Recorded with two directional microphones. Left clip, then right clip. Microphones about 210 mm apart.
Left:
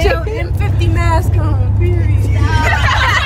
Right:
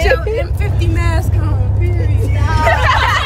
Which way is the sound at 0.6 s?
20° left (ahead or behind).